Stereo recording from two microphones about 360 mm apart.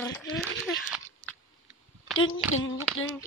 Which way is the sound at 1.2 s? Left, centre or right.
Right.